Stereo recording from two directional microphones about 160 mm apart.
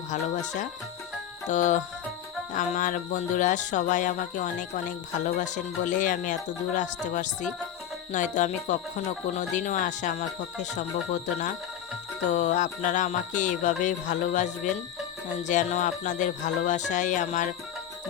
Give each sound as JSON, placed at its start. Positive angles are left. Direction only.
{"t": 0.1, "sound": "speech", "side_deg": 50}